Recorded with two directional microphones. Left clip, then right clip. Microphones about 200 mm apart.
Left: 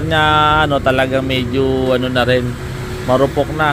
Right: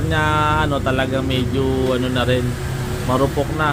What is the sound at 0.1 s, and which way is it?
Speech, 20° left (ahead or behind).